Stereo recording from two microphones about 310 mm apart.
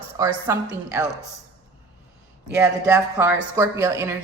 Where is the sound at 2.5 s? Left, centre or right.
Centre.